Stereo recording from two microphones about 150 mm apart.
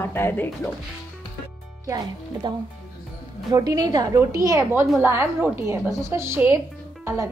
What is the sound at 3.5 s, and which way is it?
A woman's voice, 25° right (ahead or behind).